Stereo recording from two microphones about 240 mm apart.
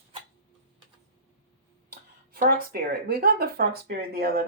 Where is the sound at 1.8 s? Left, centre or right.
Right.